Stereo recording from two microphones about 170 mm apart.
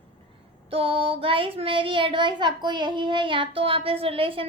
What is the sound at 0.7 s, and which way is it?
A child's voice, 35° right (ahead or behind).